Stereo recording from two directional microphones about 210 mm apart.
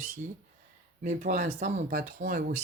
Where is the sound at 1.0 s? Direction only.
40° right (ahead or behind).